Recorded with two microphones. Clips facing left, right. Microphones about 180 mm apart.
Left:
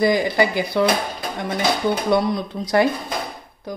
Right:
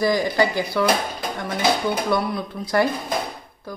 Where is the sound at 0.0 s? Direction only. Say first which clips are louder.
Left 2 dB; 15° left (ahead or behind).